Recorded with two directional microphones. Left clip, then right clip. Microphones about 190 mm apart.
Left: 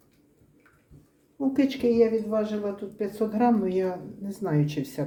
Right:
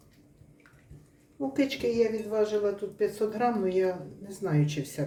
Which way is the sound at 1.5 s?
20° left (ahead or behind).